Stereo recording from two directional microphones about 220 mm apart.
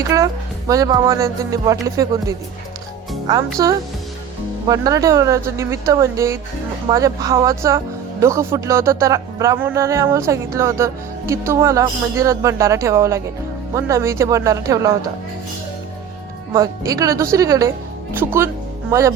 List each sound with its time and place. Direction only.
0.0 s speech: 15° right (ahead or behind)
3.6 s speech: 15° right (ahead or behind)
16.5 s speech: 15° right (ahead or behind)